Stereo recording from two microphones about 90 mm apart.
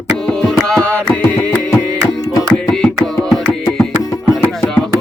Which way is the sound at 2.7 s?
10° left (ahead or behind).